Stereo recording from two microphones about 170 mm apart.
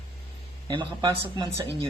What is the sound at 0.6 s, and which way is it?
Speech, 25° right (ahead or behind).